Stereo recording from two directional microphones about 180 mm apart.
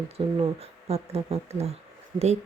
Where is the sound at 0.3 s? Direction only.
35° right (ahead or behind).